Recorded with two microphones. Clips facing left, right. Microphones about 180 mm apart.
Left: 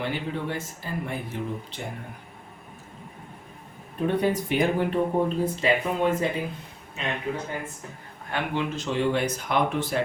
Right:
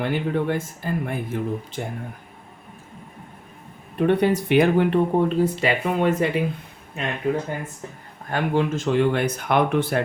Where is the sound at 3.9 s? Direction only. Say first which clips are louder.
Right 5 dB; 70° right (ahead or behind).